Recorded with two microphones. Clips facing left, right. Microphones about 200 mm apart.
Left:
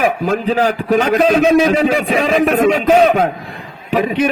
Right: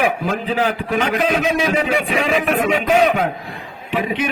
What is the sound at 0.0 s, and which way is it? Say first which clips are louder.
A man's voice: left 4 dB; 40° left (ahead or behind).